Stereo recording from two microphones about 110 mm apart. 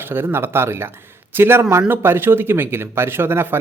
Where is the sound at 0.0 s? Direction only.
20° right (ahead or behind).